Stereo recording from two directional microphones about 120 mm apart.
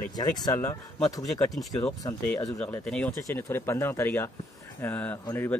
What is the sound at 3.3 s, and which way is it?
Speech, 20° left (ahead or behind).